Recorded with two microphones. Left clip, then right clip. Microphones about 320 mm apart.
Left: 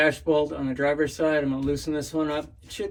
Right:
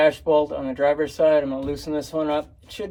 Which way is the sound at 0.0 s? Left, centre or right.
Centre.